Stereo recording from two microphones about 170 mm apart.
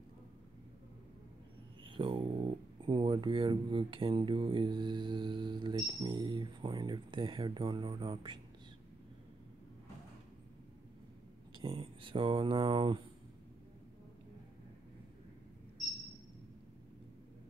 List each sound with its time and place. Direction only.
1.9 s a sound: 30° right (ahead or behind)
2.8 s speech: 30° right (ahead or behind)
11.6 s speech: 35° right (ahead or behind)